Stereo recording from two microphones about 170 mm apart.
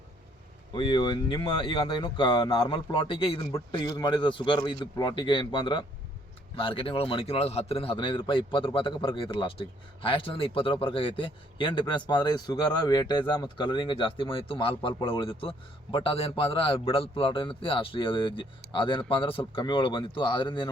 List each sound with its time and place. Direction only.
0.7 s a man's voice: 30° left (ahead or behind)